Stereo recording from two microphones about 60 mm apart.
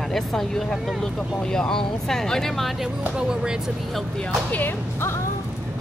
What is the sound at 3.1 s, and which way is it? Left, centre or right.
Speech, centre.